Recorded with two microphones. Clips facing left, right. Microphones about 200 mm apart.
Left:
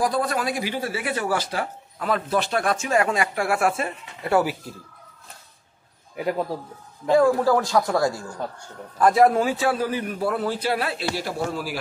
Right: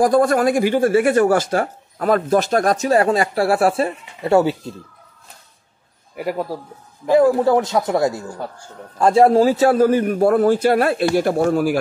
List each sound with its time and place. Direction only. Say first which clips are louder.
0.0 s speech: right 9 dB; 50° right (ahead or behind); by 4.7 s 25° right (ahead or behind)
6.1 s a man's voice: right 2 dB; 5° right (ahead or behind)
7.1 s speech: right 4 dB; 20° right (ahead or behind); by 11.8 s 50° right (ahead or behind)